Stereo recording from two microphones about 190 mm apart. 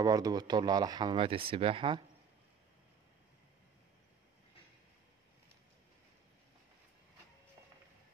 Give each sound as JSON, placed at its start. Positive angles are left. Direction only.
{"t": 0.0, "sound": "speech", "side_deg": -20}